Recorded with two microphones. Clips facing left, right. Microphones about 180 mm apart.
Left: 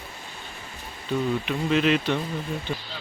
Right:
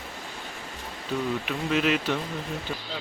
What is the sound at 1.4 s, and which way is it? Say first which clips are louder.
Speech: left 3 dB; 5° right (ahead or behind).